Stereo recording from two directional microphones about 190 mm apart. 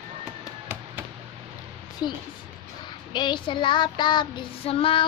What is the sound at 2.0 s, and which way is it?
Child singing, 25° left (ahead or behind).